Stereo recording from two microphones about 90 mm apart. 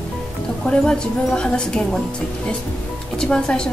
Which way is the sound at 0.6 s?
10° left (ahead or behind).